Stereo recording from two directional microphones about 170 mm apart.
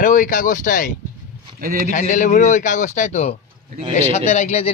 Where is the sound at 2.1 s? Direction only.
50° left (ahead or behind).